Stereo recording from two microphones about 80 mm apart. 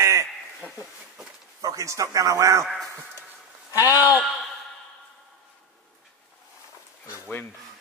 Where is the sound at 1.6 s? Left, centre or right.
Right.